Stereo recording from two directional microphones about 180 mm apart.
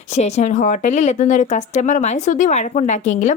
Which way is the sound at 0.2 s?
40° left (ahead or behind).